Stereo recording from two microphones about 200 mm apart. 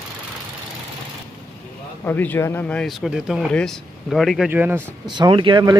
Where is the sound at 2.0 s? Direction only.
10° left (ahead or behind); by 4.8 s 10° right (ahead or behind).